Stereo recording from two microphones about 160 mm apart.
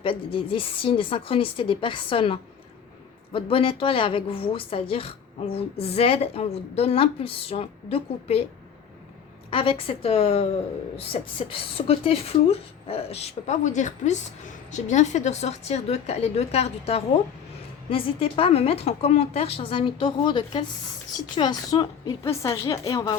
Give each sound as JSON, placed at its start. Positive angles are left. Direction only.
{"t": 0.0, "sound": "a woman's voice", "side_deg": 35}
{"t": 9.5, "sound": "a woman's voice", "side_deg": 35}